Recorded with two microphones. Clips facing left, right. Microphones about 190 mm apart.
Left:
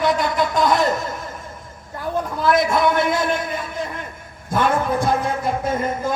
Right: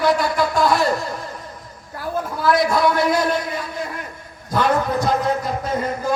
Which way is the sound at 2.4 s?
25° left (ahead or behind).